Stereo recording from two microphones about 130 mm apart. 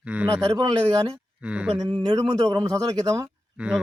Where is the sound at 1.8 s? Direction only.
40° right (ahead or behind).